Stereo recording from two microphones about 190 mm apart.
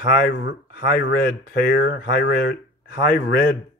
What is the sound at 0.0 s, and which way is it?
Speech, 55° left (ahead or behind).